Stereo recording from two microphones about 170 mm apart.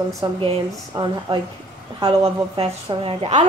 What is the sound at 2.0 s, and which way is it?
A woman's voice, 35° right (ahead or behind).